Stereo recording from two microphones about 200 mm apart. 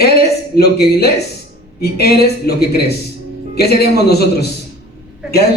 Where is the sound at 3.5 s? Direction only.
50° left (ahead or behind).